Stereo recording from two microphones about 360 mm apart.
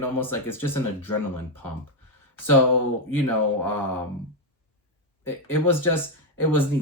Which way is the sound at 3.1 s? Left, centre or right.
Centre.